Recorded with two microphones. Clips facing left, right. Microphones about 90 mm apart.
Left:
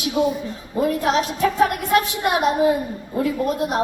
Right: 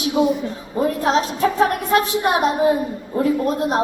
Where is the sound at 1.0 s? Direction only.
30° right (ahead or behind).